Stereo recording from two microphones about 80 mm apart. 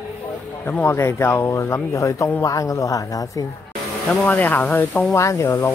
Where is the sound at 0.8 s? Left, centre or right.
Left.